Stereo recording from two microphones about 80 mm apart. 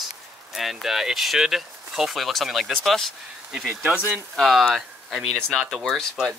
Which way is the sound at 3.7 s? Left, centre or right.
Centre.